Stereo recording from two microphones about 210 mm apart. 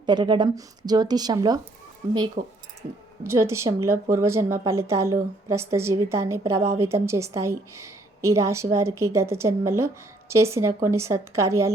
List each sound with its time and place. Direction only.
0.0 s a woman's voice: 20° right (ahead or behind)
2.4 s speech: 40° right (ahead or behind)
3.2 s a woman's voice: 15° right (ahead or behind)